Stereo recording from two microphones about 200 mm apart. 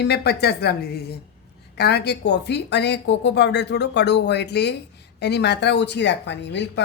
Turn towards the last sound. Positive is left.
turn(degrees=60)  # may be behind; listen again after turning